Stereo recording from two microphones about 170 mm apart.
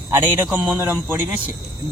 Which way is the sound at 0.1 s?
10° right (ahead or behind).